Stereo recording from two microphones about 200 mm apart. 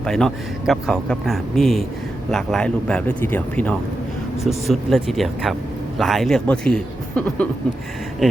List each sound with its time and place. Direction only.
0.0 s speech: centre (ahead or behind)